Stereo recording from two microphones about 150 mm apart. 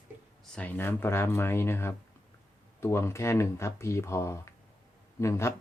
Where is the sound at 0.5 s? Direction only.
10° left (ahead or behind).